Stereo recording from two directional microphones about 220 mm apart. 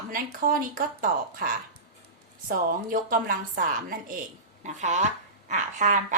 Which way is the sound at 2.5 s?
40° right (ahead or behind).